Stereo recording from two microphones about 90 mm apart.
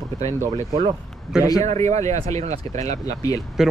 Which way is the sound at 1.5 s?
35° left (ahead or behind).